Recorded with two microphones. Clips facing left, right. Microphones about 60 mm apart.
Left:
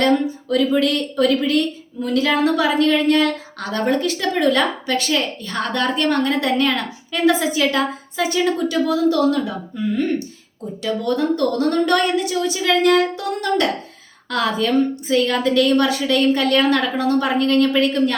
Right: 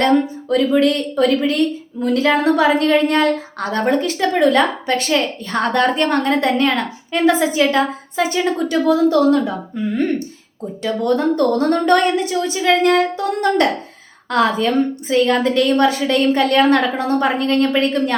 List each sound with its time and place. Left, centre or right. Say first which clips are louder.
0.0 s a sound: right 2 dB; right
0.8 s a woman's voice: right 3 dB; right
8.6 s a woman's voice: right 3 dB; right
10.8 s a woman's voice: right 3 dB; right
14.3 s a woman's voice: right 3 dB; right